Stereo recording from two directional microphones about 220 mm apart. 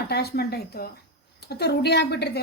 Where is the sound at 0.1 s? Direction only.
45° left (ahead or behind).